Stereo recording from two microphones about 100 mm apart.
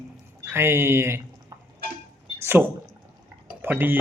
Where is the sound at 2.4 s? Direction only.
20° right (ahead or behind).